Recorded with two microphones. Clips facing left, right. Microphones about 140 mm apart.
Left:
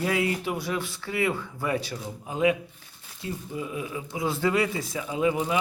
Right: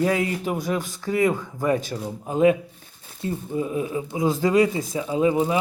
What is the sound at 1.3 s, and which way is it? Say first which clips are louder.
Speech: right 4 dB; 15° right (ahead or behind).